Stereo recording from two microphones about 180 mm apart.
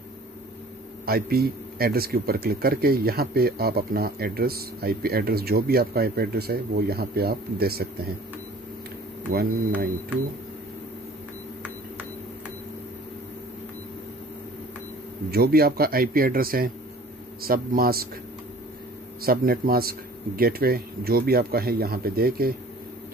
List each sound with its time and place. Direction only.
1.0 s a man's voice: 60° right (ahead or behind)
15.3 s a man's voice: 60° right (ahead or behind)
19.2 s a man's voice: 55° right (ahead or behind)